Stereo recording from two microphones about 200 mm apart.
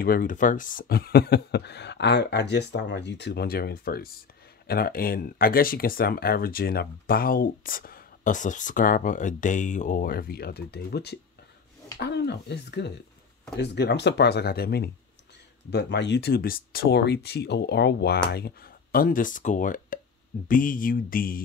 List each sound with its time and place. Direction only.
0.0 s speech: 45° left (ahead or behind)